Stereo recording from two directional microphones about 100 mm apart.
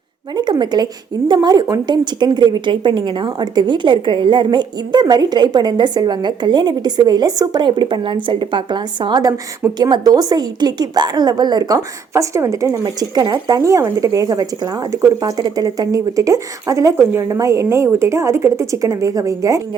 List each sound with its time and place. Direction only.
0.6 s a woman's voice: 45° right (ahead or behind)
2.1 s a woman's voice: 50° right (ahead or behind)
12.1 s speech: 30° right (ahead or behind)